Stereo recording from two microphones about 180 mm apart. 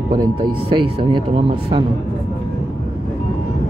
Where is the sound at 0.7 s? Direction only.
30° right (ahead or behind).